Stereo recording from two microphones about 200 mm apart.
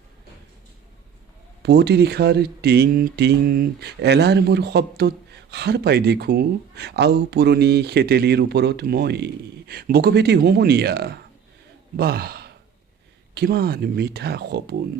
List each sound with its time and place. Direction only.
1.6 s speech: 55° right (ahead or behind)